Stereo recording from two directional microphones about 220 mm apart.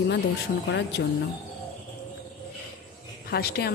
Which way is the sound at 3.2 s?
45° left (ahead or behind).